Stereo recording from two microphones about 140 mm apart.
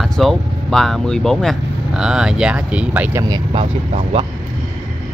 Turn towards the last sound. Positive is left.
turn(degrees=-40)  # may be behind; listen again after turning